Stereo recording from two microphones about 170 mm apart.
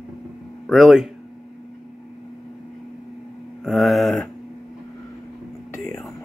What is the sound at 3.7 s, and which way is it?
Speech, centre (ahead or behind).